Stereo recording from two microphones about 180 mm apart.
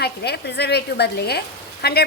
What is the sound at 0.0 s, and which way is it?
A woman's voice, 65° left (ahead or behind).